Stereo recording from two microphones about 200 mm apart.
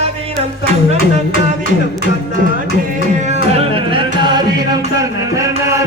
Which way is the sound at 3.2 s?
35° right (ahead or behind).